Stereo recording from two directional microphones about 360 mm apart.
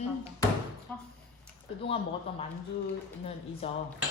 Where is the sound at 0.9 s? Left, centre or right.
Centre.